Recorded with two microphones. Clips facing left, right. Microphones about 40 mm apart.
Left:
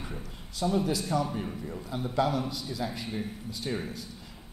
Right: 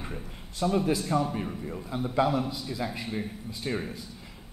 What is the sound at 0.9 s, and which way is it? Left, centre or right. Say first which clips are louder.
Speech: right 2 dB; centre.